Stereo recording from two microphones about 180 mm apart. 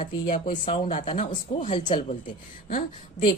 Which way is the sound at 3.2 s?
25° left (ahead or behind).